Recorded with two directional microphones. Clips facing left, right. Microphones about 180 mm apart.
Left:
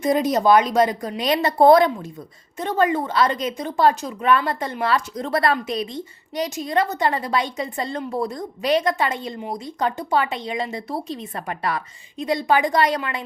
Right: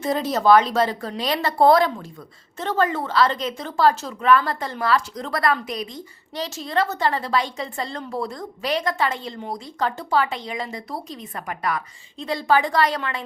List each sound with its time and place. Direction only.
0.0 s a woman's voice: 15° left (ahead or behind)
12.1 s speech: 15° left (ahead or behind)